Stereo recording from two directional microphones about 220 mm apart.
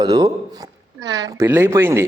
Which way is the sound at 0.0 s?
20° right (ahead or behind).